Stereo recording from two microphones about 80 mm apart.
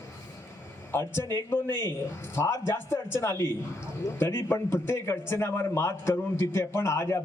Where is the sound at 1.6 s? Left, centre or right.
Right.